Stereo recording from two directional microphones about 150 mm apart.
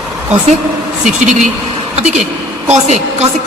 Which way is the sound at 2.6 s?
45° right (ahead or behind).